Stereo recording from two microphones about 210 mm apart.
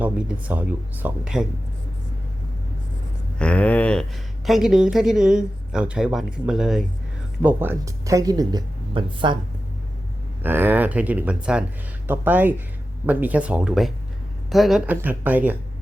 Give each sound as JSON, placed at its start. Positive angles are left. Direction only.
{"t": 0.0, "sound": "speech", "side_deg": -5}
{"t": 3.3, "sound": "speech", "side_deg": 5}
{"t": 10.4, "sound": "speech", "side_deg": -10}